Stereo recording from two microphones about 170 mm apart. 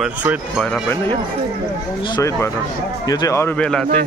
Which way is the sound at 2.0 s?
20° left (ahead or behind).